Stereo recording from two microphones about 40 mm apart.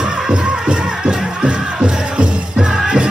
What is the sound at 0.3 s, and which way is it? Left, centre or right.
Music, right.